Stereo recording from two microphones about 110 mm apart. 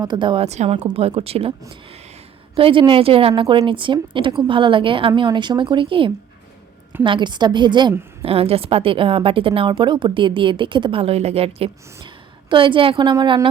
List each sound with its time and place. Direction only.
0.0 s a woman's voice: 45° right (ahead or behind)
0.4 s a woman's voice: 85° right
0.9 s a woman's voice: 65° right (ahead or behind)
2.6 s a woman's voice: 55° right (ahead or behind)
8.2 s a woman's voice: 60° right (ahead or behind); by 11.0 s 45° right (ahead or behind)
11.0 s a woman's voice: 70° right (ahead or behind)
12.0 s a woman's voice: 50° right (ahead or behind)